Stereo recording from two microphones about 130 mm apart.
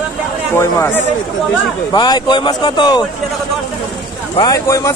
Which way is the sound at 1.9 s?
35° left (ahead or behind).